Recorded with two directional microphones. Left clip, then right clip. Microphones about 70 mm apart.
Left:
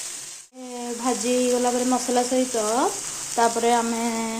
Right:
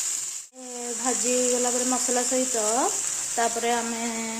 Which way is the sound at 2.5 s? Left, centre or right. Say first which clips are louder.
Left 1 dB; centre.